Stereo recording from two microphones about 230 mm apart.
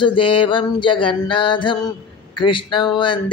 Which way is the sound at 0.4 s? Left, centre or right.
Left.